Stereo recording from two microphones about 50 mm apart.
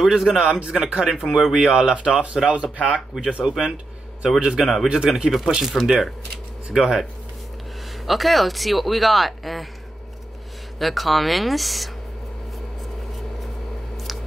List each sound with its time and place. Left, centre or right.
0.0 s a man's voice: centre
1.0 s a man's voice: centre
4.8 s a man's voice: centre
8.1 s speech: centre
10.8 s speech: centre